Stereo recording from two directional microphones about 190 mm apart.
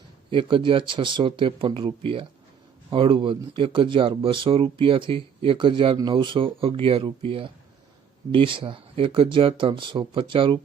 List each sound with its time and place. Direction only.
0.3 s speech: 25° right (ahead or behind)